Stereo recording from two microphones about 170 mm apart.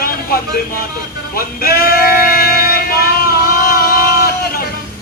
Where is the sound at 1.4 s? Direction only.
60° left (ahead or behind).